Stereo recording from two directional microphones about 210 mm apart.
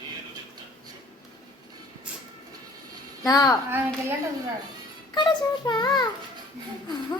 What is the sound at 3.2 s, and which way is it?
Speech, 15° left (ahead or behind).